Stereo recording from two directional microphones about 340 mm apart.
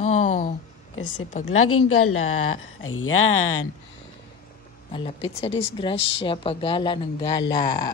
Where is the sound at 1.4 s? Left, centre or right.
Left.